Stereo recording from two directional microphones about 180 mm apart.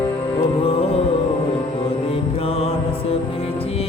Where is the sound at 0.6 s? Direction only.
30° left (ahead or behind).